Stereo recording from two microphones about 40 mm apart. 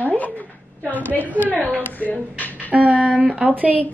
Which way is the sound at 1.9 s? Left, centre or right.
Left.